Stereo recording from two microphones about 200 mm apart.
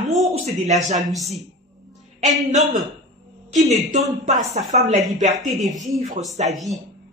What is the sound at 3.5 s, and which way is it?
Speech, 35° right (ahead or behind).